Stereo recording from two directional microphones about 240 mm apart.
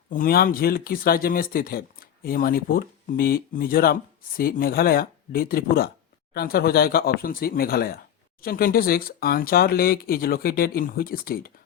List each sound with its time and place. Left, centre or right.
0.1 s speech: left